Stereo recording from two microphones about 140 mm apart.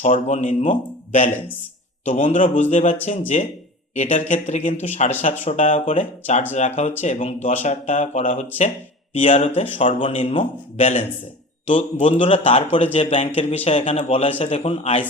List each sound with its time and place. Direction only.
0.0 s a man's voice: 60° left (ahead or behind)